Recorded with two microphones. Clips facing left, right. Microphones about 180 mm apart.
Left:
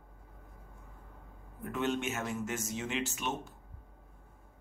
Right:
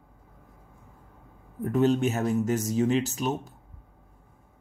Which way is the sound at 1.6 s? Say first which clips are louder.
Right 10 dB; 40° right (ahead or behind).